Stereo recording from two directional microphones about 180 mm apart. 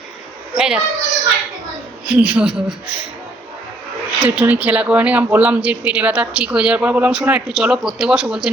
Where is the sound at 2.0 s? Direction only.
5° right (ahead or behind).